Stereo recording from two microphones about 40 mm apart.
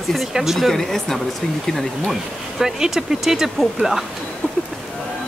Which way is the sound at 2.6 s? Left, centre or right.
Centre.